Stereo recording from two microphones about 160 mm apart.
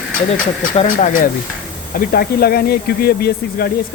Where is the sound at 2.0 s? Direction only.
70° left (ahead or behind).